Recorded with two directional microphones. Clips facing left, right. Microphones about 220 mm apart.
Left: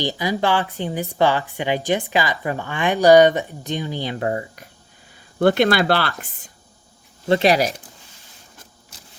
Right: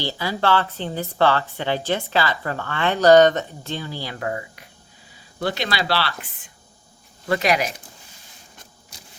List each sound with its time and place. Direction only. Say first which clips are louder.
0.0 s a woman's voice: left 2 dB; 15° left (ahead or behind)
5.4 s speech: left 9 dB; 55° left (ahead or behind)
7.3 s speech: left 4 dB; 30° left (ahead or behind)
8.5 s vehicle: even; centre (ahead or behind)